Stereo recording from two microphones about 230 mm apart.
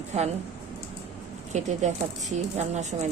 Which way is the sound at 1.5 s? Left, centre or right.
Right.